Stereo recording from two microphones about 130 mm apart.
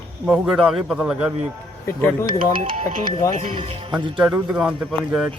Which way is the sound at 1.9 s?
20° left (ahead or behind).